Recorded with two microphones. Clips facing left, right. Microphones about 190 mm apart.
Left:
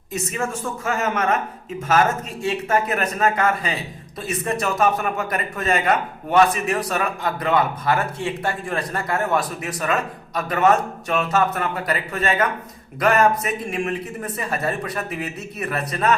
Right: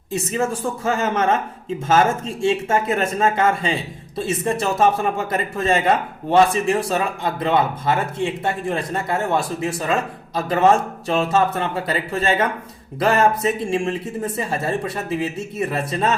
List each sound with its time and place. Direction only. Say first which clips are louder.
0.1 s a man's voice: right 4 dB; 30° right (ahead or behind)